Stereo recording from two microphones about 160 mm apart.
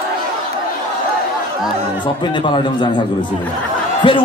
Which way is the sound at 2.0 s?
30° left (ahead or behind).